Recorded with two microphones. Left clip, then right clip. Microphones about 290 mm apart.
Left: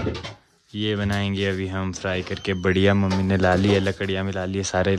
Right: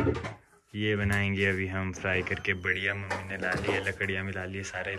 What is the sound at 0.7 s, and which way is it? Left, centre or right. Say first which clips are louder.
Speech: left 3 dB; centre.